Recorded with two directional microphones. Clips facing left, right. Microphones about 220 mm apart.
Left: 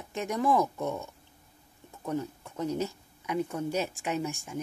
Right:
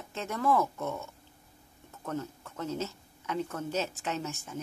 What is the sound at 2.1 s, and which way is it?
A woman's voice, 15° left (ahead or behind).